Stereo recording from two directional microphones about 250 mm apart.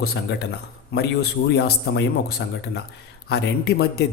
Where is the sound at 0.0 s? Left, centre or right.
Left.